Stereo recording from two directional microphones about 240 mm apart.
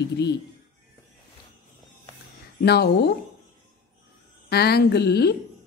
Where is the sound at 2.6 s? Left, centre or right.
Left.